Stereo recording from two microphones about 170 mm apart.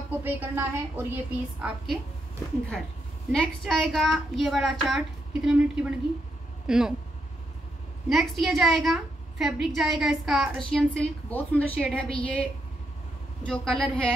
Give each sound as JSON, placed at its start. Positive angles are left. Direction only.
{"t": 0.1, "sound": "a woman's voice", "side_deg": -10}
{"t": 3.3, "sound": "a woman's voice", "side_deg": 0}
{"t": 8.1, "sound": "a woman's voice", "side_deg": 0}